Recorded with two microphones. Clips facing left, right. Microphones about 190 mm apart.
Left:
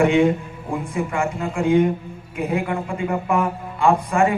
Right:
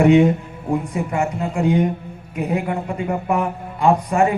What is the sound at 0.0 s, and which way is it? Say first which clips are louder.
A man's voice: right 3 dB; 40° right (ahead or behind).